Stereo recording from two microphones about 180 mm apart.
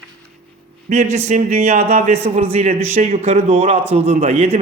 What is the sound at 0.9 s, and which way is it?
A man's voice, 40° right (ahead or behind).